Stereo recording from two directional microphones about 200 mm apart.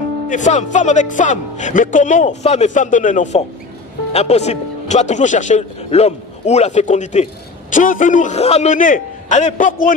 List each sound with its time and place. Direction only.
0.3 s speech: 35° left (ahead or behind)